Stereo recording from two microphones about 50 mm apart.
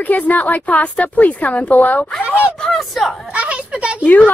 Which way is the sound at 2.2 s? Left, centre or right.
Right.